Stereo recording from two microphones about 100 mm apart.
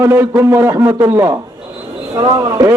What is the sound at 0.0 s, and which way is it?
A man's voice, 20° right (ahead or behind).